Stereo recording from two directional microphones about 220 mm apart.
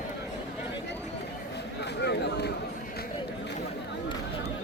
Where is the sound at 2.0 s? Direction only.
50° left (ahead or behind).